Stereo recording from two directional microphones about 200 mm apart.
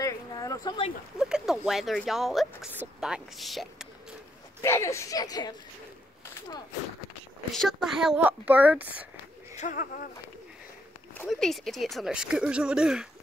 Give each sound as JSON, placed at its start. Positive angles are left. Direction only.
{"t": 0.0, "sound": "a sound", "side_deg": 15}
{"t": 1.1, "sound": "a sound", "side_deg": -5}
{"t": 1.7, "sound": "speech", "side_deg": 0}
{"t": 4.6, "sound": "speech", "side_deg": 15}
{"t": 7.5, "sound": "speech", "side_deg": 0}
{"t": 9.6, "sound": "speech", "side_deg": 40}
{"t": 11.2, "sound": "speech", "side_deg": 0}